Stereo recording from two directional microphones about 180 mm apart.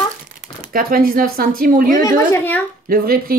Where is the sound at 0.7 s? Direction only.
55° right (ahead or behind).